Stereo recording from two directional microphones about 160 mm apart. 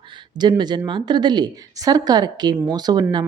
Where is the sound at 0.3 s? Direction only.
25° right (ahead or behind).